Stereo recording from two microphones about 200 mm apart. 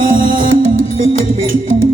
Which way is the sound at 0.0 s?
45° right (ahead or behind).